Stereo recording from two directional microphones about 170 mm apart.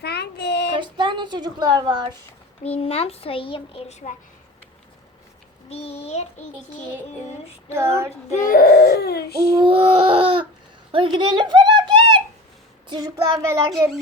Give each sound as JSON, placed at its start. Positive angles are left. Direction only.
{"t": 0.0, "sound": "child singing", "side_deg": 70}
{"t": 0.8, "sound": "a woman's voice", "side_deg": -30}
{"t": 2.6, "sound": "a child's voice", "side_deg": 35}
{"t": 5.6, "sound": "a child's voice", "side_deg": 40}
{"t": 7.7, "sound": "child singing", "side_deg": -15}
{"t": 8.4, "sound": "speech", "side_deg": 60}
{"t": 9.5, "sound": "a sound", "side_deg": -30}
{"t": 12.9, "sound": "child singing", "side_deg": -25}